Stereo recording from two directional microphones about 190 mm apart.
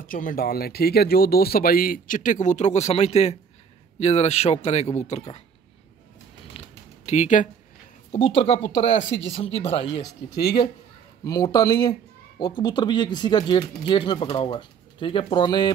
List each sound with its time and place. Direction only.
0.0 s a man's voice: 45° left (ahead or behind)
6.5 s typing: 35° left (ahead or behind)
7.1 s a man's voice: 40° left (ahead or behind)
8.4 s a man's voice: 25° left (ahead or behind)
10.0 s speech: 60° left (ahead or behind)
11.2 s speech: 20° left (ahead or behind)